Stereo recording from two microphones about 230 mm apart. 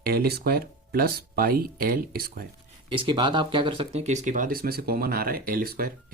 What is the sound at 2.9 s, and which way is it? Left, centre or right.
Speech, right.